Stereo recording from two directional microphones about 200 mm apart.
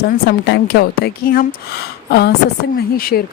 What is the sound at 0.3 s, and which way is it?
Speech, 55° left (ahead or behind).